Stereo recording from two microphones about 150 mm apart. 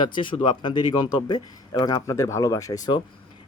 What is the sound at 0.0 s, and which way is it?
A man's voice, 35° left (ahead or behind).